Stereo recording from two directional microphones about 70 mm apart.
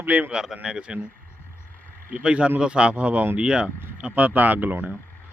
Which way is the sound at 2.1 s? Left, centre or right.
Centre.